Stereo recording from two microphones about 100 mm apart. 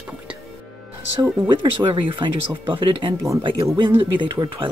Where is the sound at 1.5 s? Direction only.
60° right (ahead or behind).